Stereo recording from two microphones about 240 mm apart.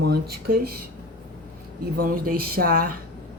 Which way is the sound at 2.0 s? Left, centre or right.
Right.